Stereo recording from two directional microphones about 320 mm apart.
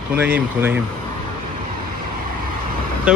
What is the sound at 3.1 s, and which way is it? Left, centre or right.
Speech, centre.